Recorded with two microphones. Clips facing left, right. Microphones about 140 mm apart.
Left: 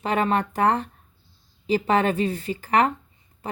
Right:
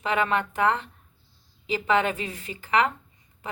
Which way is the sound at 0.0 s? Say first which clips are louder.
Left 2 dB; 35° left (ahead or behind).